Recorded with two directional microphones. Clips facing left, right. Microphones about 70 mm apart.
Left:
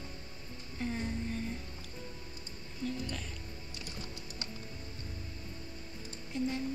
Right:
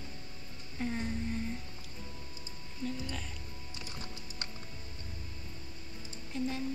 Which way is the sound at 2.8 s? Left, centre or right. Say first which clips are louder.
Left 1 dB; centre.